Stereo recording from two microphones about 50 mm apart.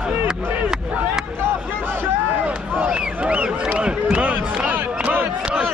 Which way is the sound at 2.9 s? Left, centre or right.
Right.